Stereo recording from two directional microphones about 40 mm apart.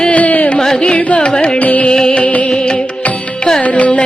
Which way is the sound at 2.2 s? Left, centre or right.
Left.